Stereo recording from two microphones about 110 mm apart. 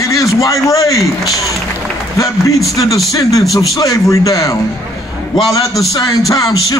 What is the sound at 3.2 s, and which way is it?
A man's voice, 30° left (ahead or behind).